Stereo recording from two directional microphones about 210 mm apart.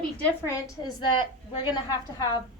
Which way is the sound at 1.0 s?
25° left (ahead or behind).